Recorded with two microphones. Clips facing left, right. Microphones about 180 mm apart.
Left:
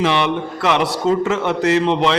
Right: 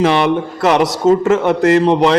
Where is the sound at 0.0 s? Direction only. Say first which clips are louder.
Right 5 dB; 45° right (ahead or behind).